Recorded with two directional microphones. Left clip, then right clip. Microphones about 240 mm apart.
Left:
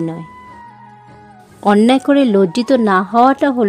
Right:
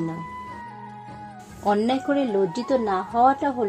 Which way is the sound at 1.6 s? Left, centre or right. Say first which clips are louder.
Left 10 dB; left.